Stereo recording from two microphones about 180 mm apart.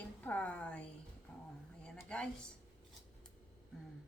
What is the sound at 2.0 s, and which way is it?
Speech, 5° left (ahead or behind).